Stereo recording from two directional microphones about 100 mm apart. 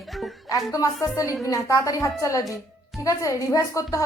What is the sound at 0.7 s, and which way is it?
A woman's voice, 35° left (ahead or behind).